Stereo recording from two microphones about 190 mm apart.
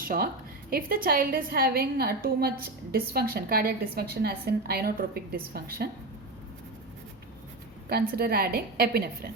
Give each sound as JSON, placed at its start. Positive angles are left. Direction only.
{"t": 0.0, "sound": "a woman's voice", "side_deg": -50}
{"t": 7.9, "sound": "a woman's voice", "side_deg": -55}